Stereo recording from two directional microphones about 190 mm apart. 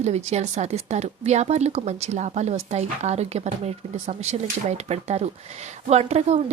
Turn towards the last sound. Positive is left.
turn(degrees=-35)  # may be behind; listen again after turning